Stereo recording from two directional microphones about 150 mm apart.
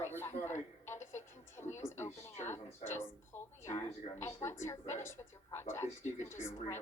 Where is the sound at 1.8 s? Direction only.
15° left (ahead or behind).